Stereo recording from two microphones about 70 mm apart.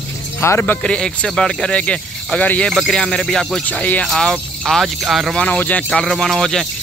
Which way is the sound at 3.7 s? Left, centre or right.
Left.